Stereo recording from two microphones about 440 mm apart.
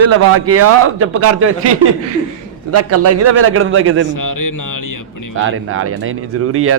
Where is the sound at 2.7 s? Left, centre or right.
Right.